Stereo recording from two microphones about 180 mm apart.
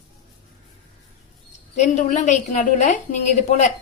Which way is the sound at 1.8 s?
40° left (ahead or behind).